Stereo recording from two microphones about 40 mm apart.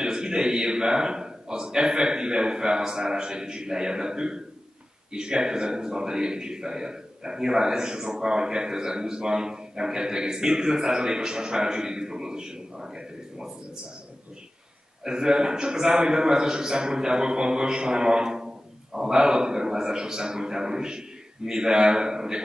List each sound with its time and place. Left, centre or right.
0.0 s a man's voice: centre
15.0 s speech: centre